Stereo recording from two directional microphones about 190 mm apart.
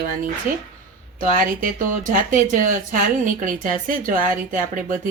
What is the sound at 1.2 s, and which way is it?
Speech, 50° right (ahead or behind).